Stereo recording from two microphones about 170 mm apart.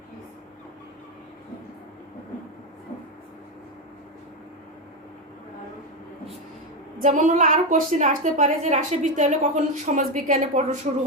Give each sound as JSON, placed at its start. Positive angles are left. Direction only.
{"t": 7.0, "sound": "a woman's voice", "side_deg": -50}